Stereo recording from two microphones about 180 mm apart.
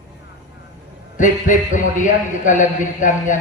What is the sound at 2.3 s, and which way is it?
A man's voice, 45° left (ahead or behind).